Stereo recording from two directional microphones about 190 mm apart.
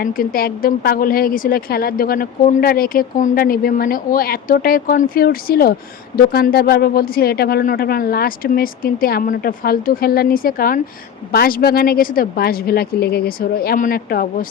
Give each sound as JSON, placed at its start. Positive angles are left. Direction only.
{"t": 0.0, "sound": "a woman's voice", "side_deg": 50}